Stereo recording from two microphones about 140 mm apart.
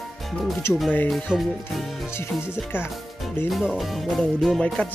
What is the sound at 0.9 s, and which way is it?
Music, 10° left (ahead or behind).